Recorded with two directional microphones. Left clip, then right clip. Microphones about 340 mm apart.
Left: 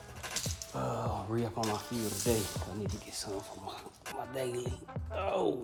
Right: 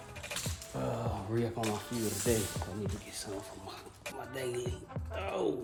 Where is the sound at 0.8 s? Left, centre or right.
Centre.